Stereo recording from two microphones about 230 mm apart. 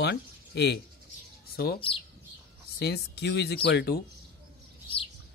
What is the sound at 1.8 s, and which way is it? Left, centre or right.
Speech, left.